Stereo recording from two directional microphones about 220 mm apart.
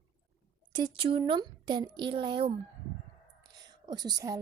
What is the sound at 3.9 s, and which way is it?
Speech, 20° right (ahead or behind).